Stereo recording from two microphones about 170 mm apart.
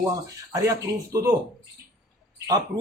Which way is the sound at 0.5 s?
20° right (ahead or behind).